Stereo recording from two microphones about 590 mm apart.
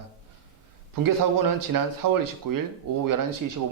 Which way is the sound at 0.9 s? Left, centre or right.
Right.